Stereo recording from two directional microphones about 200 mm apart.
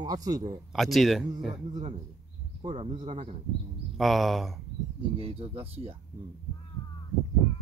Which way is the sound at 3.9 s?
Centre (ahead or behind).